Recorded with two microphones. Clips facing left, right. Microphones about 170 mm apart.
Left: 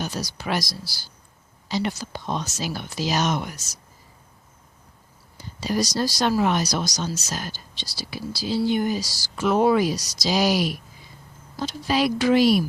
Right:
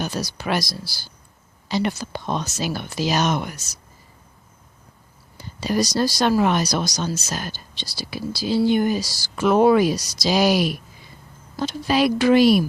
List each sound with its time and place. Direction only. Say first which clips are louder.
0.0 s speech: right 3 dB; 60° right (ahead or behind)
5.4 s speech: right 3 dB; 60° right (ahead or behind)